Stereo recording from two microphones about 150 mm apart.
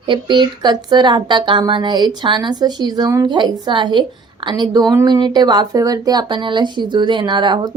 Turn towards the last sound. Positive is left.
turn(degrees=-30)  # may be behind; listen again after turning